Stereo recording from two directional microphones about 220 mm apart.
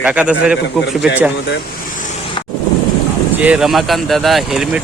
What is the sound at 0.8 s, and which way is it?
Speech, 50° left (ahead or behind).